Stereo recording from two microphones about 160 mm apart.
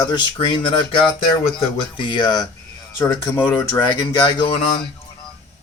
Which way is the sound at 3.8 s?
25° left (ahead or behind).